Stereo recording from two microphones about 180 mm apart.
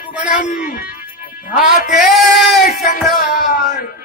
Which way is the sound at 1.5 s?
Centre (ahead or behind).